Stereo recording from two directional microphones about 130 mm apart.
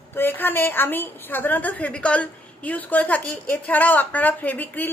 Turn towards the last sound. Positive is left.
turn(degrees=15)  # may be behind; listen again after turning